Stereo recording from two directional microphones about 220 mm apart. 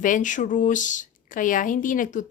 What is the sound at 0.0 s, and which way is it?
Speech, 35° left (ahead or behind).